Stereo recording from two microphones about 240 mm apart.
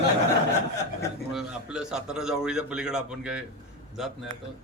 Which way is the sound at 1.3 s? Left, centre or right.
Centre.